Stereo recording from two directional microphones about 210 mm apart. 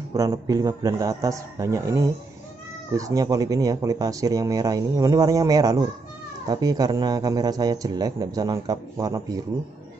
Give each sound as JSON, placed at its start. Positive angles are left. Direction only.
{"t": 0.1, "sound": "speech", "side_deg": -15}